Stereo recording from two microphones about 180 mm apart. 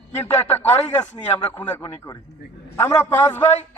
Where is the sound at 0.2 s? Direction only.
10° left (ahead or behind).